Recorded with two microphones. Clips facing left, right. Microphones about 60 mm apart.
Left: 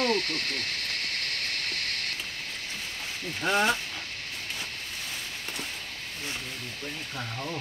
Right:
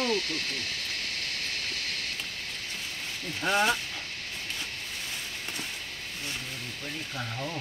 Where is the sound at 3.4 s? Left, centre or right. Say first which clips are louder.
Left 1 dB; centre.